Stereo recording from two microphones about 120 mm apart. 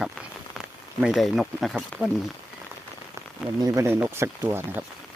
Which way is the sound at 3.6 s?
25° right (ahead or behind).